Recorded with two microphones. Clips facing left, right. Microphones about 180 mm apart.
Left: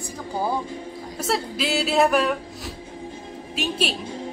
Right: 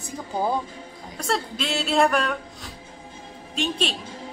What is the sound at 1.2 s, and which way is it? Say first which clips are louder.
A woman's voice: left 2 dB; 5° left (ahead or behind).